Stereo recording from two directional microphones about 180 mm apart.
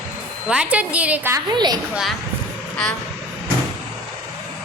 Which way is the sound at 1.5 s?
25° right (ahead or behind).